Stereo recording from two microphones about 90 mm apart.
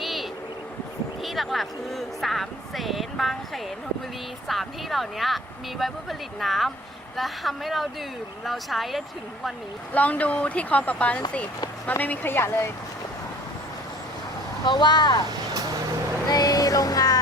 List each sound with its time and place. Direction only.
0.0 s vehicle: centre (ahead or behind)
1.2 s speech: centre (ahead or behind)
9.9 s a woman's voice: 15° left (ahead or behind)
14.6 s speech: 55° left (ahead or behind)
16.3 s music: 45° left (ahead or behind)